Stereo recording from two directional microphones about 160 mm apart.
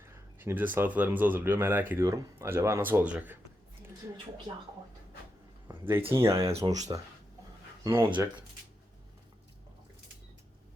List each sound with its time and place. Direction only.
0.0 s speech: 15° right (ahead or behind)
4.5 s speech: 25° right (ahead or behind)
6.2 s speech: 15° right (ahead or behind)